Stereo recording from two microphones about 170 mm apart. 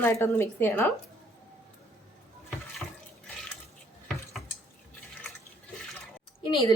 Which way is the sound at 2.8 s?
10° left (ahead or behind).